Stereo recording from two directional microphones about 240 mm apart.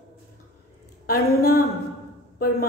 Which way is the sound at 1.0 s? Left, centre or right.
Left.